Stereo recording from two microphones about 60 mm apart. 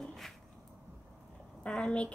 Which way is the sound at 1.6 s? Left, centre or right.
Centre.